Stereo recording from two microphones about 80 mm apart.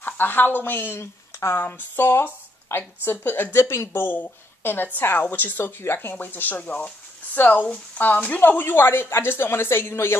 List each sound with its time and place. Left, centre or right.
0.0 s a woman's voice: left